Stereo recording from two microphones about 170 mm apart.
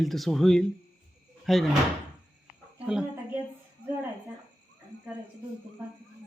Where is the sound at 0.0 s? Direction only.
Centre (ahead or behind).